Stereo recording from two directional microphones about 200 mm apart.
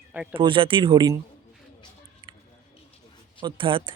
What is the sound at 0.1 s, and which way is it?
Speech, 10° right (ahead or behind).